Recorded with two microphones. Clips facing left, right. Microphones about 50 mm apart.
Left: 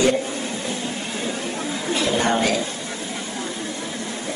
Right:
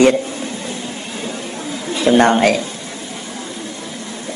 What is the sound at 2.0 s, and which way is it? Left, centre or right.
Speech, right.